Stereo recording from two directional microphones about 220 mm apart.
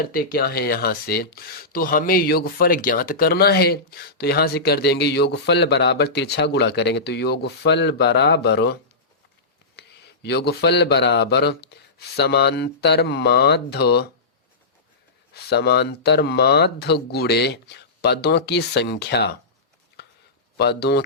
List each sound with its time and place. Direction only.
0.0 s speech: 40° left (ahead or behind)
10.2 s speech: 50° left (ahead or behind)
15.3 s speech: 50° left (ahead or behind)
20.0 s a sound: 50° left (ahead or behind)
20.6 s speech: 50° left (ahead or behind)